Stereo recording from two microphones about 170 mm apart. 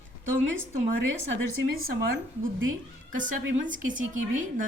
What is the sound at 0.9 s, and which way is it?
Speech, 90° right.